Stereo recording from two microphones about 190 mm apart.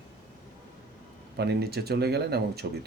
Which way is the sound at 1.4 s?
60° right (ahead or behind).